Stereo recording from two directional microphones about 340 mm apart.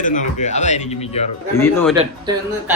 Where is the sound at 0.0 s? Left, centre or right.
Left.